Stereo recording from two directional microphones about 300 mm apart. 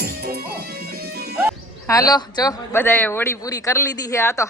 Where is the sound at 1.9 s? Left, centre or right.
Centre.